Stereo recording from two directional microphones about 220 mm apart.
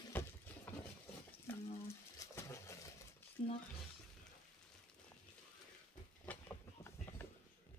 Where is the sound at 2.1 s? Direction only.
15° left (ahead or behind).